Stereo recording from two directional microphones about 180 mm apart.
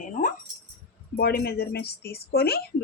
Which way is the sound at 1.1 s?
60° left (ahead or behind).